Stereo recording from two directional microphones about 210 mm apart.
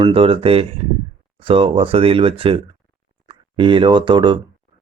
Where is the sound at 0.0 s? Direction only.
25° right (ahead or behind).